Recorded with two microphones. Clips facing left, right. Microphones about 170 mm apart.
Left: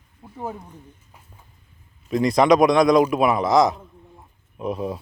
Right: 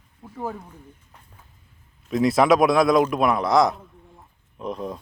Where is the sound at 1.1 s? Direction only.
5° left (ahead or behind).